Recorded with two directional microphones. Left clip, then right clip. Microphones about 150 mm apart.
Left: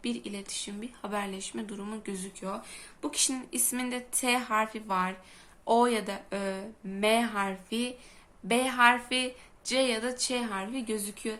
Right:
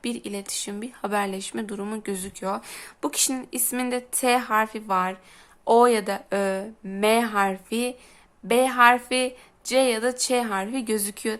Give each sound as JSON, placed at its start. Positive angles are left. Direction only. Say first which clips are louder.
{"t": 0.0, "sound": "a woman's voice", "louder": "right 5 dB", "side_deg": -55}